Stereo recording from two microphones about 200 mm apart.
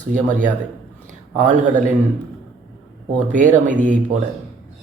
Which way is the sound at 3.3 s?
40° right (ahead or behind).